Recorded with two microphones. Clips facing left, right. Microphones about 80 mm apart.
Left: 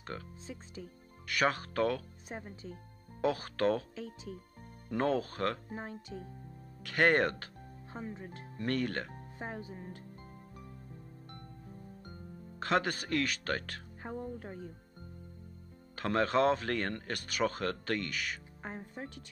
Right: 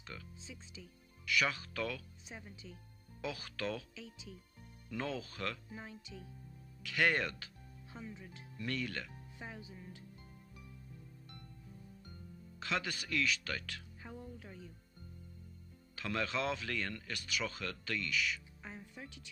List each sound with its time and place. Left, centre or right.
0.0 s speech: left
11.7 s music: left
16.0 s speech: left